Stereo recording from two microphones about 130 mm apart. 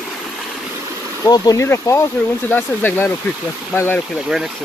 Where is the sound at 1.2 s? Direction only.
30° left (ahead or behind).